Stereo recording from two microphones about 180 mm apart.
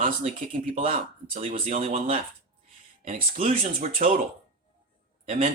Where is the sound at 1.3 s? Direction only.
35° right (ahead or behind).